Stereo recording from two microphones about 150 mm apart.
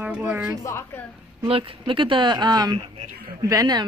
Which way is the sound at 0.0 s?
10° right (ahead or behind).